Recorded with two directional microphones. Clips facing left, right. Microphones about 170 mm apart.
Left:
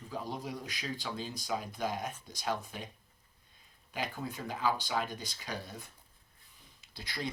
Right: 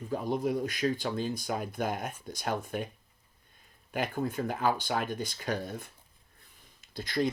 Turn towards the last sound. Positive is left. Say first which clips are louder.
# right 10 dB
turn(degrees=-50)  # may be behind; listen again after turning